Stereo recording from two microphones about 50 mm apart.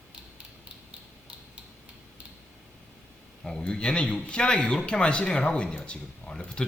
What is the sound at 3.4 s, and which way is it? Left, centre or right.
Speech, centre.